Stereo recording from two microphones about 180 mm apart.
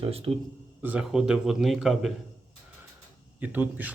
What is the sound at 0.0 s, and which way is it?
Speech, 35° right (ahead or behind).